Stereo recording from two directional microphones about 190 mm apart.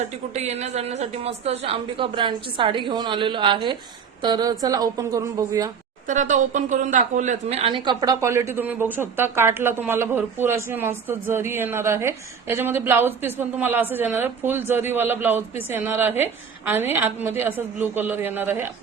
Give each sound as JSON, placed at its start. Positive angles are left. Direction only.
{"t": 0.3, "sound": "a woman's voice", "side_deg": -35}
{"t": 6.1, "sound": "a woman's voice", "side_deg": -40}